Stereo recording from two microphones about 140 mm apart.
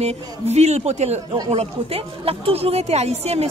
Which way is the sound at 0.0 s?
50° right (ahead or behind).